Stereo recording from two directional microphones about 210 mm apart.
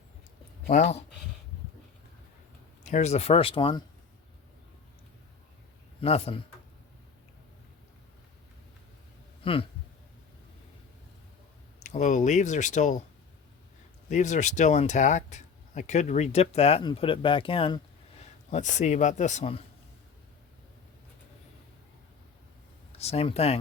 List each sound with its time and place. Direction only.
0.7 s speech: 30° left (ahead or behind)
2.8 s speech: 35° left (ahead or behind)
6.0 s speech: 30° left (ahead or behind)
9.4 s speech: 25° left (ahead or behind)
11.8 s speech: 35° left (ahead or behind)
14.1 s speech: 35° left (ahead or behind)
23.0 s speech: 30° left (ahead or behind)